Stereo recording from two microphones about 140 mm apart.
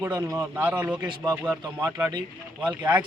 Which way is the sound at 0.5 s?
10° right (ahead or behind).